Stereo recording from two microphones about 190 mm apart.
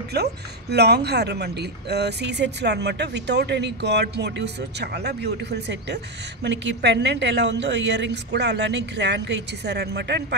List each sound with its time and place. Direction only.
0.1 s speech: 60° right (ahead or behind)